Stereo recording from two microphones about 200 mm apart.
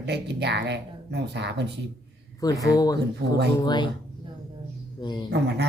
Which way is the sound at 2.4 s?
15° left (ahead or behind).